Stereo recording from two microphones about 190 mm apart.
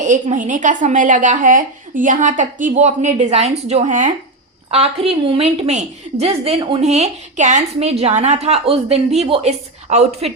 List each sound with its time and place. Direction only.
0.0 s a woman's voice: 40° right (ahead or behind)